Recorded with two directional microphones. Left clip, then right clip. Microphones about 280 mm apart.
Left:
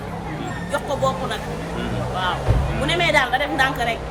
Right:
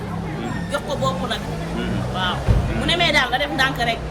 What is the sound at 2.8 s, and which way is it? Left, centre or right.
A woman's voice, centre.